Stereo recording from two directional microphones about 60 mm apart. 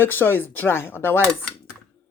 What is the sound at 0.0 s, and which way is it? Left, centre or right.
Speech, left.